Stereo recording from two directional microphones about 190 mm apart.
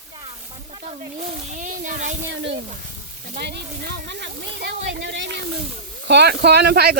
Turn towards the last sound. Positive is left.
turn(degrees=-60)  # may be behind; listen again after turning